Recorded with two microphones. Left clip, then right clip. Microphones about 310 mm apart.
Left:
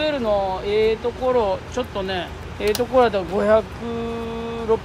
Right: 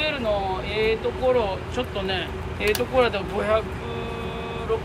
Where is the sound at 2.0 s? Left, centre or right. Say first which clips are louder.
Left 1 dB; centre.